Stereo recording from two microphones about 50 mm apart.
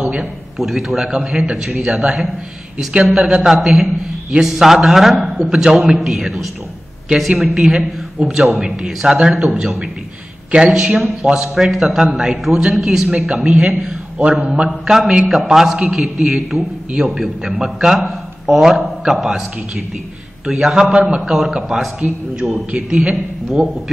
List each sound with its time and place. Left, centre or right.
0.0 s a sound: centre
0.6 s a man's voice: centre
3.2 s a man's voice: right
3.4 s a man's voice: centre
5.4 s a man's voice: centre
11.5 s a man's voice: centre
21.2 s a man's voice: centre
22.0 s a man's voice: centre
23.1 s a man's voice: centre